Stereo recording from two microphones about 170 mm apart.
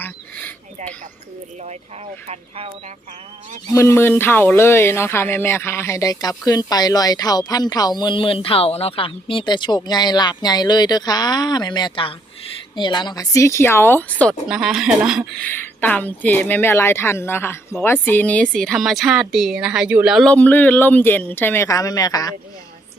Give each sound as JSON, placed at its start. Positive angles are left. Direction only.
{"t": 0.0, "sound": "a sound", "side_deg": 10}
{"t": 2.2, "sound": "speech", "side_deg": -35}
{"t": 3.8, "sound": "a woman's voice", "side_deg": 15}
{"t": 14.4, "sound": "a woman's voice", "side_deg": -5}
{"t": 20.3, "sound": "a woman's voice", "side_deg": 10}